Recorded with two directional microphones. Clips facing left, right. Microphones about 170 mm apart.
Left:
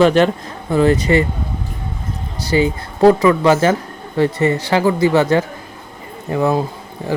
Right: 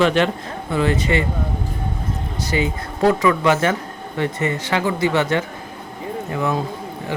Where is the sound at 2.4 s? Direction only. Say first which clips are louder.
Left 7 dB; 30° left (ahead or behind).